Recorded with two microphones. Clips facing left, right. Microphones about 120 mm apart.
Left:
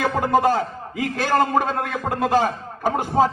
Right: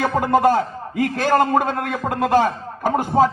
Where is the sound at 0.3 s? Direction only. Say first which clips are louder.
Right 3 dB; 45° right (ahead or behind).